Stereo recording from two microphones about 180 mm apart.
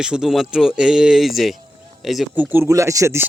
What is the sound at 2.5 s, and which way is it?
Speech, 15° right (ahead or behind).